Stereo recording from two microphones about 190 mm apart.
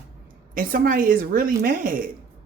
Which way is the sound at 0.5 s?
45° right (ahead or behind).